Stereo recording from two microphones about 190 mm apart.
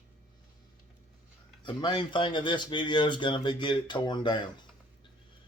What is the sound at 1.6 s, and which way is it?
Speech, 25° left (ahead or behind).